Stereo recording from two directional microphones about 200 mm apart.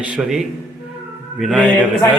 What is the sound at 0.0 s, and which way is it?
A woman's voice, 5° right (ahead or behind).